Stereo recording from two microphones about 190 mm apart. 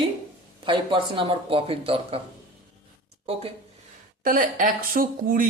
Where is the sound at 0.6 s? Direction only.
25° right (ahead or behind).